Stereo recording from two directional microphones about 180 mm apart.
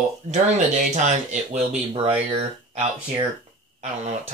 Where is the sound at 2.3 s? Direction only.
30° right (ahead or behind).